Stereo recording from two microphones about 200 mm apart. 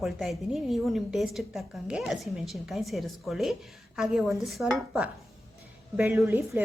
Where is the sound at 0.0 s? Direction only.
Centre (ahead or behind).